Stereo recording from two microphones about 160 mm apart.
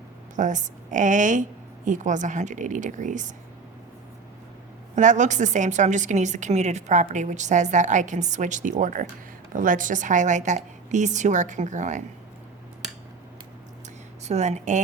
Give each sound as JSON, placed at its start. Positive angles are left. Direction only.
{"t": 0.3, "sound": "a woman's voice", "side_deg": -50}
{"t": 4.9, "sound": "a woman's voice", "side_deg": -50}
{"t": 14.3, "sound": "a woman's voice", "side_deg": -45}